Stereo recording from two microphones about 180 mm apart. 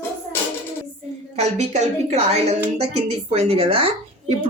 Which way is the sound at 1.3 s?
40° right (ahead or behind).